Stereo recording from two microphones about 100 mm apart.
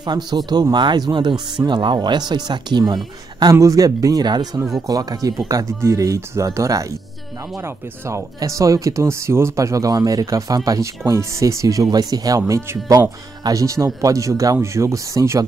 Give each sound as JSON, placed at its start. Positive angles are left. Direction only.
{"t": 0.0, "sound": "speech", "side_deg": -45}